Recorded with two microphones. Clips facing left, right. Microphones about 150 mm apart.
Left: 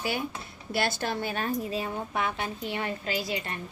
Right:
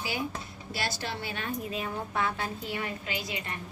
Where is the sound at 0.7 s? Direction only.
55° left (ahead or behind); by 1.9 s 35° left (ahead or behind).